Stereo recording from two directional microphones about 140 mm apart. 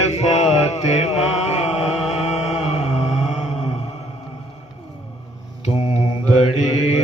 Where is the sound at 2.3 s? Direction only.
5° right (ahead or behind).